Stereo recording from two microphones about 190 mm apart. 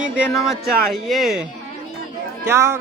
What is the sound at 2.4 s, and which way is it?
Speech, 15° right (ahead or behind).